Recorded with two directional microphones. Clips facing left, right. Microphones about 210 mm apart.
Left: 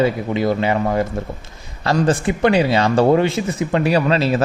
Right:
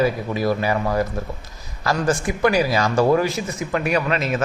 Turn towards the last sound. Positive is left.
turn(degrees=30)  # may be behind; listen again after turning